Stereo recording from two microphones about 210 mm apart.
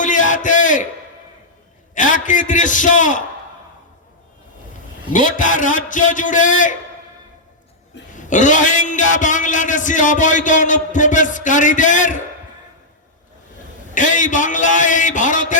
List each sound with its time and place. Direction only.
0.0 s a sound: 35° left (ahead or behind)
2.0 s a man's voice: 40° left (ahead or behind)
5.1 s a man's voice: 40° left (ahead or behind)
8.1 s a man's voice: 35° left (ahead or behind)
13.9 s a man's voice: 35° left (ahead or behind)